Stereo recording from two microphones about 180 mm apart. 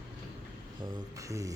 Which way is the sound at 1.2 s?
15° right (ahead or behind).